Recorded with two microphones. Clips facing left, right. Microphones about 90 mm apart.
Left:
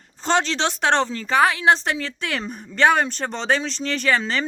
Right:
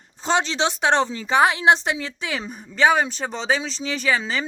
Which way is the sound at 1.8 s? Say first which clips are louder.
Left 1 dB; 10° right (ahead or behind).